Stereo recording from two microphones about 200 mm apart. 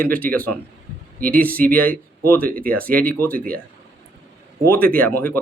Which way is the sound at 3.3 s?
45° right (ahead or behind).